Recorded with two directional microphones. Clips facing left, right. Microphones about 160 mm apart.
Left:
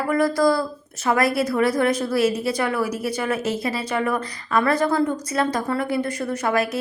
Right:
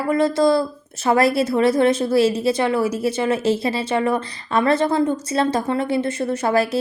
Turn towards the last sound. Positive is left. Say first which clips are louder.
# right 3 dB
turn(degrees=-30)  # may be behind; listen again after turning